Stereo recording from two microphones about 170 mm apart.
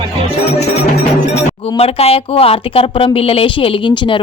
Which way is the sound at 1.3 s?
35° left (ahead or behind).